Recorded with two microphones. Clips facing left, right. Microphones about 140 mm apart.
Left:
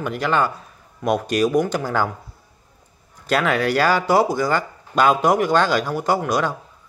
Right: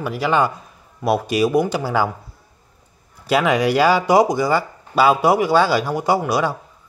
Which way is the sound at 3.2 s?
10° right (ahead or behind).